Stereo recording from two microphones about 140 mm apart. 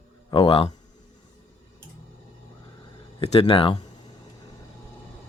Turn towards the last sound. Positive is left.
turn(degrees=40)  # may be behind; listen again after turning